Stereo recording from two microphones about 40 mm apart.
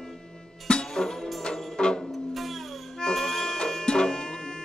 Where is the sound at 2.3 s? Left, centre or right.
Centre.